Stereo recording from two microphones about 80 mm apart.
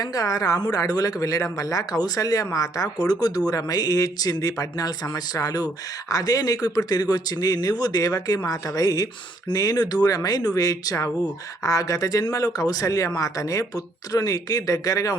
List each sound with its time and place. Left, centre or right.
0.0 s speech: left